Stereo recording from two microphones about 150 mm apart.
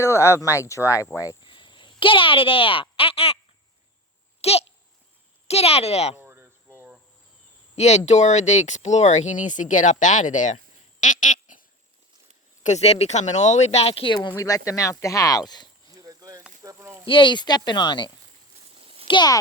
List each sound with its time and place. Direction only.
0.0 s speech: 20° left (ahead or behind); by 3.3 s 40° left (ahead or behind)
4.4 s babbling: 45° left (ahead or behind)
5.5 s speech: 45° left (ahead or behind)
6.1 s cricket: 15° right (ahead or behind)
7.8 s speech: 50° left (ahead or behind)
11.0 s a sound: 60° left (ahead or behind)
12.6 s speech: 45° left (ahead or behind); by 15.7 s 25° left (ahead or behind)
15.9 s a sound: 25° right (ahead or behind)
17.1 s speech: 35° left (ahead or behind)
18.7 s a sound: 40° right (ahead or behind)
19.0 s a child's voice: 30° left (ahead or behind)